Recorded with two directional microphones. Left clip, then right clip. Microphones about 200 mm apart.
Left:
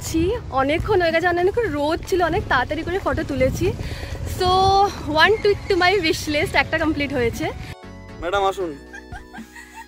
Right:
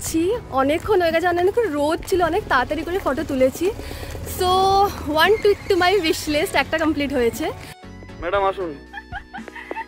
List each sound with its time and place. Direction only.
0.0 s speech: centre (ahead or behind)
8.2 s speech: 15° left (ahead or behind)